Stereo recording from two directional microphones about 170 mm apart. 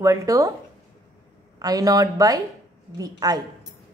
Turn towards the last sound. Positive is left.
turn(degrees=-20)  # may be behind; listen again after turning